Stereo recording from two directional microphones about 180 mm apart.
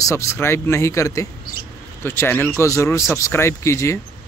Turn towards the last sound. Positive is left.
turn(degrees=15)  # may be behind; listen again after turning